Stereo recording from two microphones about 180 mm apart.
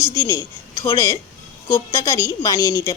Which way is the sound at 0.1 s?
15° left (ahead or behind).